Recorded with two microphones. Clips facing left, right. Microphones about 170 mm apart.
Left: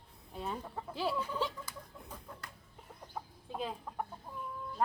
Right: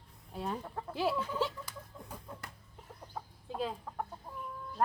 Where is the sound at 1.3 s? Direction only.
10° right (ahead or behind).